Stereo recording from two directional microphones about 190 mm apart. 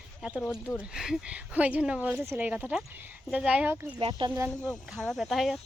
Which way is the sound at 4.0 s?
30° right (ahead or behind).